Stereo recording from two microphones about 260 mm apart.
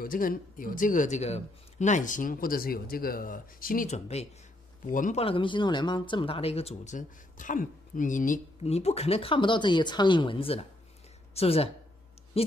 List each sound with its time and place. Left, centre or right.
0.0 s a man's voice: left